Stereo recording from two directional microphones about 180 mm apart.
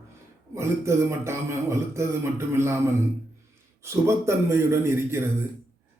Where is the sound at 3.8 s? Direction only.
15° right (ahead or behind).